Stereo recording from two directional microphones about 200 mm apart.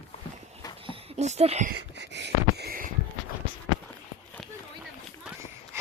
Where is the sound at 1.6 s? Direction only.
60° right (ahead or behind).